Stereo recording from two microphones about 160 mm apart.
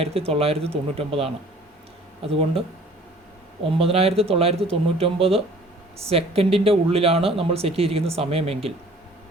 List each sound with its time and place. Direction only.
0.0 s speech: 35° right (ahead or behind)
3.6 s speech: 35° right (ahead or behind)